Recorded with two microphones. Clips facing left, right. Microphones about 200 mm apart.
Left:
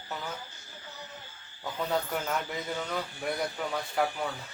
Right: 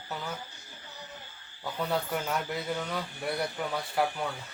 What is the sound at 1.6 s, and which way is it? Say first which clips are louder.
Speech: even; centre (ahead or behind).